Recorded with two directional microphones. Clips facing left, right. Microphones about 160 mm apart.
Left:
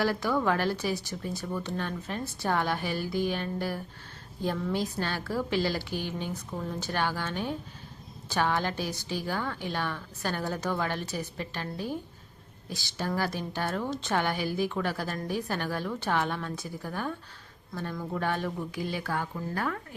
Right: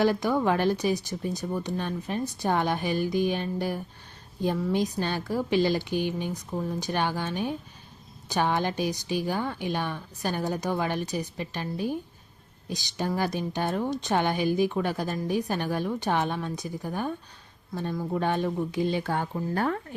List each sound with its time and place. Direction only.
0.0 s a woman's voice: 20° right (ahead or behind)